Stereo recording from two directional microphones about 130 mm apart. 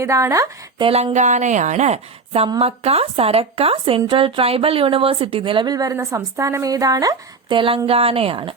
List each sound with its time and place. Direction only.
0.0 s speech: 20° right (ahead or behind)
0.8 s a woman's voice: 45° right (ahead or behind)
1.1 s a woman's voice: 65° right (ahead or behind); by 7.6 s 30° right (ahead or behind)
7.9 s a woman's voice: 45° right (ahead or behind)